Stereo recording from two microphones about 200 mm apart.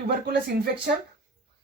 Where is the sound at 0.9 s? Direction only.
50° right (ahead or behind).